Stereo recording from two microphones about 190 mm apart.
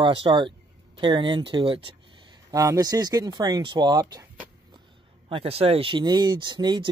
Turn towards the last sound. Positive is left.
turn(degrees=-25)  # may be behind; listen again after turning